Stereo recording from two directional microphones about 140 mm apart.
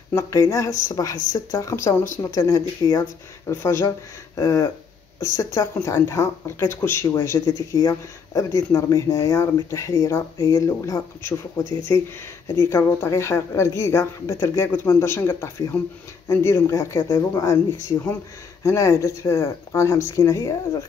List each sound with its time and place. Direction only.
0.1 s speech: 20° left (ahead or behind)